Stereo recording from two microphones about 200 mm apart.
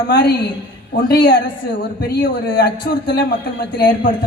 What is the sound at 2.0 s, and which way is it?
A man's voice, 50° left (ahead or behind).